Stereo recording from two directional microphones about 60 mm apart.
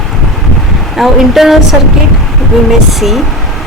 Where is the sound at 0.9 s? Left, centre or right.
Centre.